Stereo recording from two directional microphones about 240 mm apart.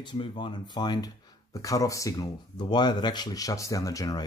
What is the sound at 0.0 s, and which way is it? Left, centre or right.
Speech, centre.